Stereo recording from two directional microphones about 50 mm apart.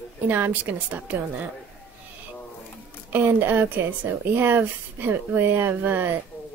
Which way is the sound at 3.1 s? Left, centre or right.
Right.